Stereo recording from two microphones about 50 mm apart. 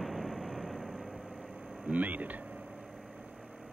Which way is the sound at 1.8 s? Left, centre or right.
Right.